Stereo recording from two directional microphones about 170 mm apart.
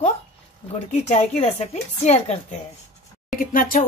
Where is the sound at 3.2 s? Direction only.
55° left (ahead or behind).